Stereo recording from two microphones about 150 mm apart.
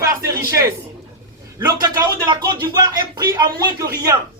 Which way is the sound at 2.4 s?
25° right (ahead or behind).